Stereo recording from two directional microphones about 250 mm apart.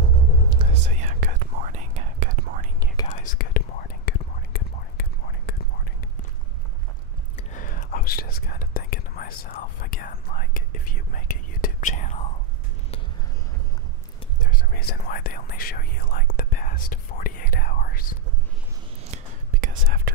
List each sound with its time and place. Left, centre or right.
0.5 s whispering: right
3.1 s whispering: left
7.5 s whispering: left
14.5 s whispering: left
19.6 s whispering: right